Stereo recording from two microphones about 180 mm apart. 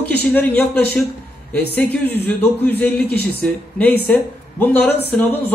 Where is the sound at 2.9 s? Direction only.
60° left (ahead or behind).